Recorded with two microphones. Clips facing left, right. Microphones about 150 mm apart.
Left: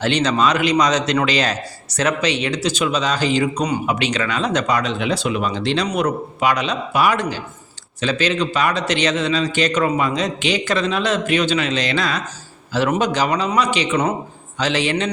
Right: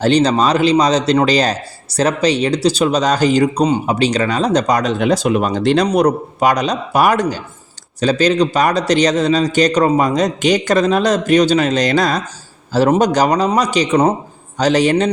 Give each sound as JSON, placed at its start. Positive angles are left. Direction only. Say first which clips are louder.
{"t": 0.0, "sound": "a man's voice", "louder": "right 5 dB", "side_deg": -35}